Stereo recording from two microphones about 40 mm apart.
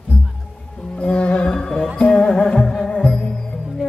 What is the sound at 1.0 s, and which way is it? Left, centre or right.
Music, left.